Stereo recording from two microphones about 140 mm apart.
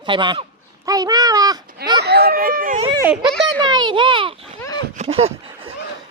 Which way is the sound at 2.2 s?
90° right.